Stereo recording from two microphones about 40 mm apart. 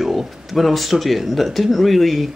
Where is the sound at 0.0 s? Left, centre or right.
Centre.